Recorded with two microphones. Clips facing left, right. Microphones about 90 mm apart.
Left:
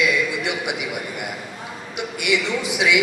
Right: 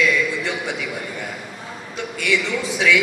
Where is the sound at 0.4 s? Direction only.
15° left (ahead or behind).